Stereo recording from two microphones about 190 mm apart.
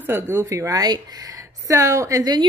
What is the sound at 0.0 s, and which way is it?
A woman's voice, 15° right (ahead or behind).